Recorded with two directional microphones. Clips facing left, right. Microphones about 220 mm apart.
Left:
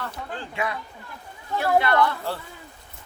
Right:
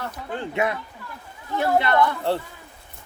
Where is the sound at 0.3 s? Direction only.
20° right (ahead or behind).